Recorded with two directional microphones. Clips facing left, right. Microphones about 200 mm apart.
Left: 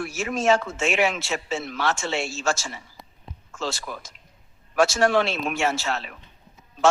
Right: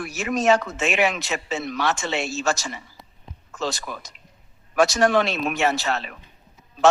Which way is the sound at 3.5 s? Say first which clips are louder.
Right 2 dB; 15° right (ahead or behind).